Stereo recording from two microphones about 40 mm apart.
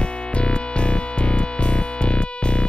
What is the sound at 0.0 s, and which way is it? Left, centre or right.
Music, left.